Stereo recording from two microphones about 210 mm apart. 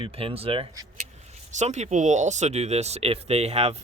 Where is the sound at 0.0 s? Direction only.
25° right (ahead or behind).